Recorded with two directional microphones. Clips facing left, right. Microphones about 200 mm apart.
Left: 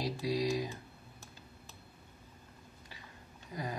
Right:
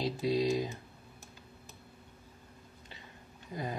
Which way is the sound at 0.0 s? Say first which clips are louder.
Right 3 dB; 25° right (ahead or behind).